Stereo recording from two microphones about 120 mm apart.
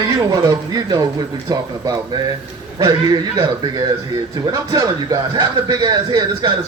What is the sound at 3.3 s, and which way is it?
A man's voice, 30° right (ahead or behind).